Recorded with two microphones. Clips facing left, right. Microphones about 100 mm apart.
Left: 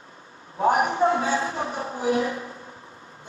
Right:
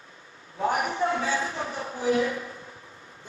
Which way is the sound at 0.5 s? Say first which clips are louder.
Left 5 dB; 35° left (ahead or behind).